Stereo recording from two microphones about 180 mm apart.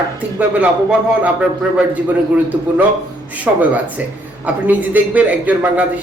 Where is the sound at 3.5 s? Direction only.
5° right (ahead or behind).